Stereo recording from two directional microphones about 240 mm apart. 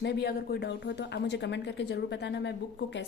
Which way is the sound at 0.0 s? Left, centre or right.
Left.